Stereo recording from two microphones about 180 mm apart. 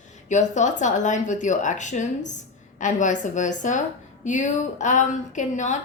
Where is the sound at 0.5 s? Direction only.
40° left (ahead or behind).